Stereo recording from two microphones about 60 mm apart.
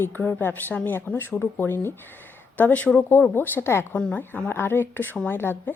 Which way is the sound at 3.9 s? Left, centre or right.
Left.